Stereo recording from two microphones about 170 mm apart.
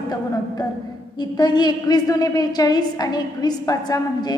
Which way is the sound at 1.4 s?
25° left (ahead or behind).